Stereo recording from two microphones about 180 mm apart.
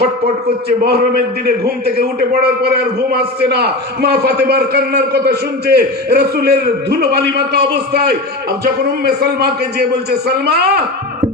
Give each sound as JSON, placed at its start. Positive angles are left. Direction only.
{"t": 0.9, "sound": "a man's voice", "side_deg": -60}